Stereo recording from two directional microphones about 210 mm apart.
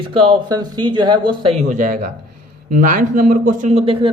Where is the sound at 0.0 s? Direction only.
25° right (ahead or behind).